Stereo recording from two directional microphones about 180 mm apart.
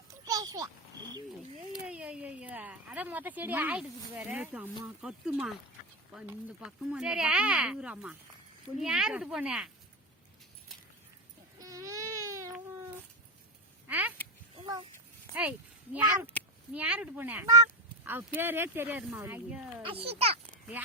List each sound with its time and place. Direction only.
0.1 s a sound: 20° right (ahead or behind)
1.8 s a woman's voice: 5° right (ahead or behind)
11.6 s baby cry: 20° right (ahead or behind)
13.8 s a sound: 10° right (ahead or behind)
15.4 s a woman's voice: 10° right (ahead or behind)
19.8 s a child's voice: 30° right (ahead or behind)
20.8 s a woman's voice: 10° right (ahead or behind)